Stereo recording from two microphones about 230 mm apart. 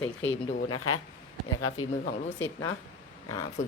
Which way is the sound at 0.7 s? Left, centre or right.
Left.